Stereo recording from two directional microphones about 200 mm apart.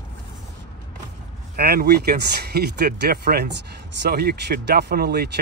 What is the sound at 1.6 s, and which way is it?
Speech, 50° right (ahead or behind).